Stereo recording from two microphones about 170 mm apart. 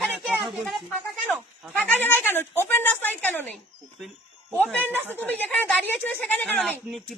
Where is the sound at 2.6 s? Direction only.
15° left (ahead or behind).